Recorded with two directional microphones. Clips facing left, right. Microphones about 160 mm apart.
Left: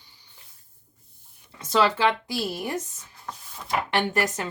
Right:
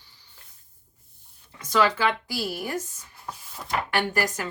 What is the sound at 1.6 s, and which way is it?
Speech, 25° left (ahead or behind).